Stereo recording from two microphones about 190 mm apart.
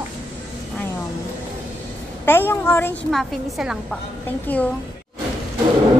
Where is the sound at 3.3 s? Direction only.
Centre (ahead or behind).